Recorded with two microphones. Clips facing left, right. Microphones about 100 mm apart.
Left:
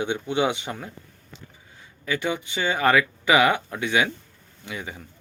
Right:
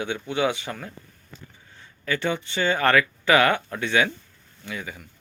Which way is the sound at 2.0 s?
10° left (ahead or behind).